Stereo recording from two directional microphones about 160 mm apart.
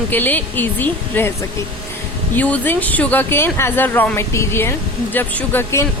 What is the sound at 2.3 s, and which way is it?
Speech, 10° left (ahead or behind).